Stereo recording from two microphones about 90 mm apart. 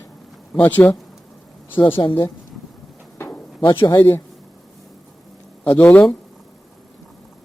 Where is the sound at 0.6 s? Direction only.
20° left (ahead or behind).